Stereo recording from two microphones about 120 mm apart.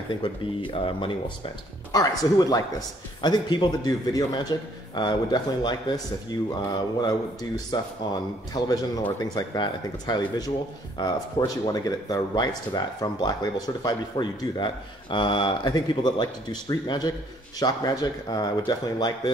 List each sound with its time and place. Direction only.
0.2 s speech: 45° left (ahead or behind)
1.9 s speech: 35° left (ahead or behind)